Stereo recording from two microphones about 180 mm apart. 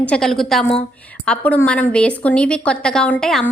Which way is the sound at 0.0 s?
5° left (ahead or behind).